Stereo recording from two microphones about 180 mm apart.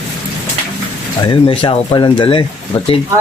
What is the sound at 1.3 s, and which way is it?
Speech, 25° left (ahead or behind).